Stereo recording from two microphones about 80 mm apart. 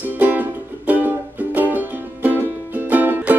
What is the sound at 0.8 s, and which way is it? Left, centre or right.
Music, right.